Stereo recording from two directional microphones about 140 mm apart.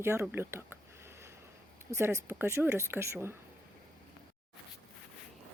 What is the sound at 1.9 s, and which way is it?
A woman's voice, 20° right (ahead or behind).